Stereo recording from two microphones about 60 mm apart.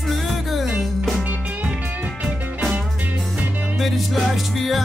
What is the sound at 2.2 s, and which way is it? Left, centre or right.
Music, centre.